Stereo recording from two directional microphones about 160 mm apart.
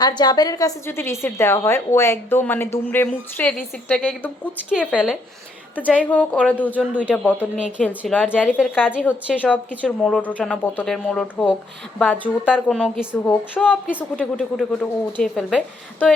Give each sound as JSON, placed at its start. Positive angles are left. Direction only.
{"t": 0.2, "sound": "a woman's voice", "side_deg": 25}
{"t": 0.9, "sound": "speech", "side_deg": 15}
{"t": 4.7, "sound": "speech", "side_deg": -5}
{"t": 6.1, "sound": "speech", "side_deg": 10}
{"t": 6.7, "sound": "speech", "side_deg": -10}
{"t": 7.5, "sound": "speech", "side_deg": 5}
{"t": 8.2, "sound": "speech", "side_deg": -5}
{"t": 9.3, "sound": "speech", "side_deg": 10}